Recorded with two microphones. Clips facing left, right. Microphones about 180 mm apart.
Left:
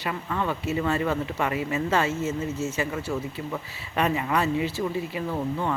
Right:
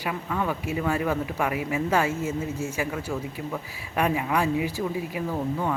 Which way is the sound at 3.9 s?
10° right (ahead or behind).